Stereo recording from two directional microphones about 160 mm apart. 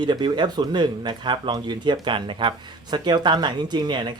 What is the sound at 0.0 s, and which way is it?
Speech, 30° right (ahead or behind).